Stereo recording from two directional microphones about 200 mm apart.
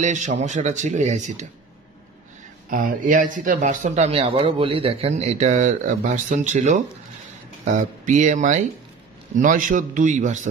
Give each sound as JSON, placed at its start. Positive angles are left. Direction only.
{"t": 0.0, "sound": "a man's voice", "side_deg": -35}
{"t": 2.7, "sound": "a man's voice", "side_deg": -45}